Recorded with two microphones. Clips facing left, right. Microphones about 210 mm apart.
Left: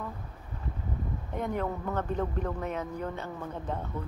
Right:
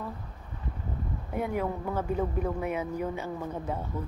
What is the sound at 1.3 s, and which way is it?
Speech, 10° right (ahead or behind).